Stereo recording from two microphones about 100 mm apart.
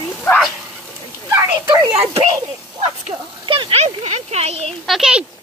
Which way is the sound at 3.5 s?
65° right (ahead or behind).